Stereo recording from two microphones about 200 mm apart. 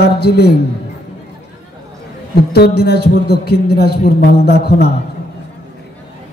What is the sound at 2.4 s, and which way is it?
A man's voice, 55° left (ahead or behind).